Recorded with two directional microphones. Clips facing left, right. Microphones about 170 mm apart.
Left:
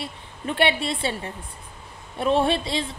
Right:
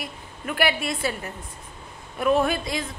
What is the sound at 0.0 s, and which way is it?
A woman's voice, 30° left (ahead or behind).